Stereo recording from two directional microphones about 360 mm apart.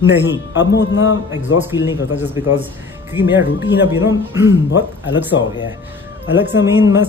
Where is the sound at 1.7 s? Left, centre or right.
Centre.